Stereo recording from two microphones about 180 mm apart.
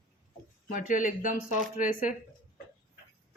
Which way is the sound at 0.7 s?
45° left (ahead or behind).